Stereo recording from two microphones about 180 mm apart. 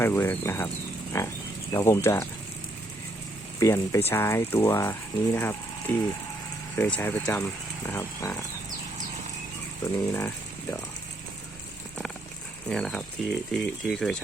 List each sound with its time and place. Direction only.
0.0 s speech: 10° left (ahead or behind)
3.6 s speech: 15° left (ahead or behind)
10.2 s a sound: 10° left (ahead or behind)
12.6 s speech: 5° left (ahead or behind)